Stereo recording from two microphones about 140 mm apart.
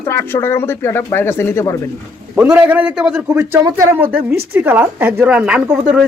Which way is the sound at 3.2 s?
15° right (ahead or behind).